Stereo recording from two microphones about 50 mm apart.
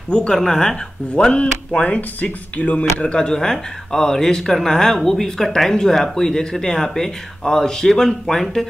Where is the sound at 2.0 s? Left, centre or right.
Left.